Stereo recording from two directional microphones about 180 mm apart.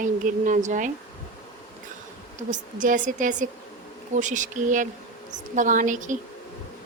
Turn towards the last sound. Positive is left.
turn(degrees=-45)  # may be behind; listen again after turning